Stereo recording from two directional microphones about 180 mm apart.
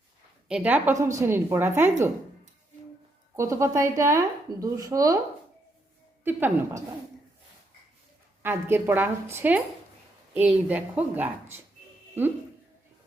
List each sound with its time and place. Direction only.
0.4 s a woman's voice: 5° right (ahead or behind)
3.3 s a woman's voice: 15° right (ahead or behind)
6.2 s a woman's voice: 10° right (ahead or behind)
8.4 s a woman's voice: 10° right (ahead or behind)